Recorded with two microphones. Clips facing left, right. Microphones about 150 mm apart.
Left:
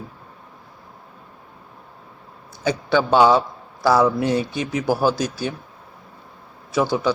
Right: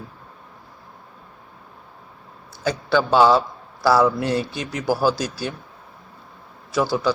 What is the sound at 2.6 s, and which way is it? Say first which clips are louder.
A man's voice: left 1 dB; 15° left (ahead or behind).